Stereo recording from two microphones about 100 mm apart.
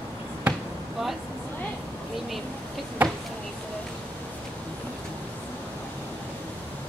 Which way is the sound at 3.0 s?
15° right (ahead or behind).